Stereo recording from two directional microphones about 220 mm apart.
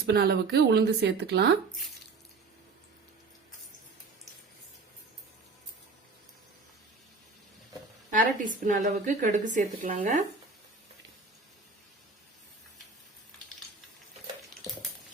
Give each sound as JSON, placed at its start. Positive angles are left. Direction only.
{"t": 0.0, "sound": "speech", "side_deg": -45}
{"t": 8.1, "sound": "a woman's voice", "side_deg": -35}